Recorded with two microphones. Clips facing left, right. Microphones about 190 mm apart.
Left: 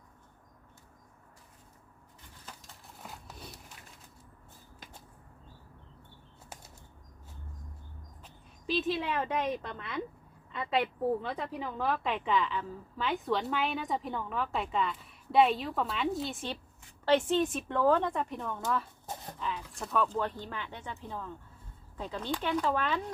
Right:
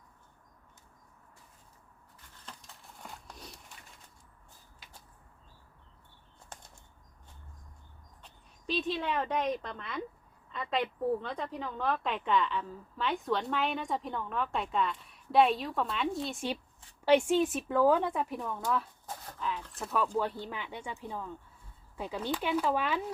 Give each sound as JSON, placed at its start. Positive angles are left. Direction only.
{"t": 2.5, "sound": "a sound", "side_deg": 0}
{"t": 8.2, "sound": "a woman's voice", "side_deg": 5}
{"t": 17.1, "sound": "speech", "side_deg": -10}
{"t": 19.0, "sound": "dog", "side_deg": 20}
{"t": 19.4, "sound": "speech", "side_deg": 0}